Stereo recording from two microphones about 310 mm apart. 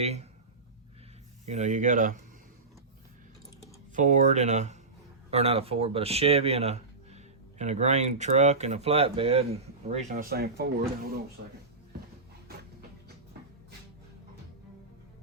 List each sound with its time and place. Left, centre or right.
0.0 s speech: right
1.5 s speech: right
3.9 s speech: right